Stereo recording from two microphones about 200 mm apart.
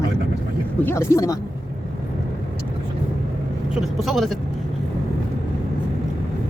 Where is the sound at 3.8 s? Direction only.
Centre (ahead or behind).